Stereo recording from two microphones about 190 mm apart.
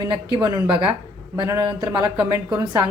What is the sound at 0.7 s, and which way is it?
A woman's voice, 25° right (ahead or behind).